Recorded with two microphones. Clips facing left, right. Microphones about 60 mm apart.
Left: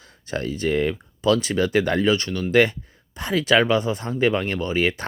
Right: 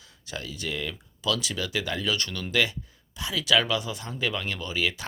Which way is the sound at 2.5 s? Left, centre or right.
Left.